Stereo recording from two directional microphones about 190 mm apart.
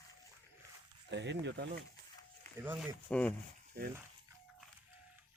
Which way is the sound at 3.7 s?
55° right (ahead or behind).